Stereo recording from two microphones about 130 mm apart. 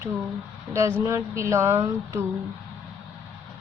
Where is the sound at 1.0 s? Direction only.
20° right (ahead or behind).